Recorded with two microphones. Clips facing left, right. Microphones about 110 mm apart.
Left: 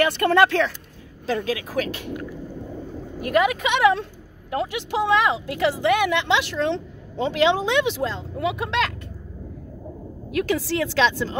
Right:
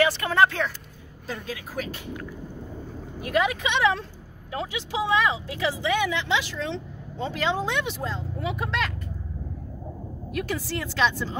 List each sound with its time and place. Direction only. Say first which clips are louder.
0.0 s a woman's voice: left 3 dB; 60° left (ahead or behind)
1.2 s speech: left 10 dB; 90° left
3.2 s a woman's voice: left 4 dB; 55° left (ahead or behind); by 8.9 s 90° left
10.3 s speech: left 7 dB; 90° left